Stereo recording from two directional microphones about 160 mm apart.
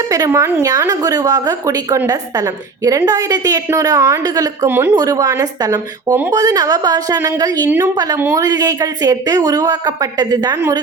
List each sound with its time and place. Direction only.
0.1 s a woman's voice: 20° right (ahead or behind)